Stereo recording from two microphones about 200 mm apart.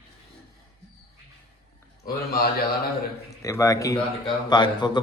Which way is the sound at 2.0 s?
50° left (ahead or behind).